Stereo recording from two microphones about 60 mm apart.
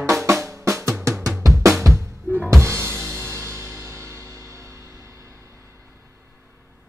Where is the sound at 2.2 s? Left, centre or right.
Right.